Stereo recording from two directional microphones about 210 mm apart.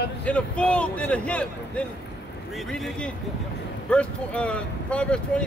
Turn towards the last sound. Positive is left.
turn(degrees=5)  # may be behind; listen again after turning